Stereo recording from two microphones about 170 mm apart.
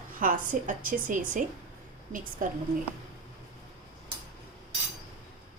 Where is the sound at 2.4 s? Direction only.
50° right (ahead or behind).